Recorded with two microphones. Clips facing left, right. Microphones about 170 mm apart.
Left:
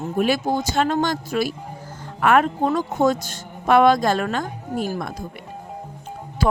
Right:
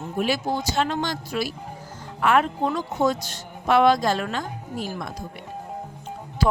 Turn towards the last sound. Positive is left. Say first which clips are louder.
# left 1 dB
turn(degrees=50)  # may be behind; listen again after turning